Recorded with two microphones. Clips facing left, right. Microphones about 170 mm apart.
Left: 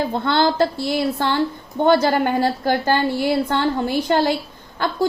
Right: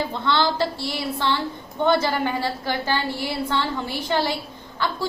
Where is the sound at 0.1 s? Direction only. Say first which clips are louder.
Left 4 dB; 50° left (ahead or behind).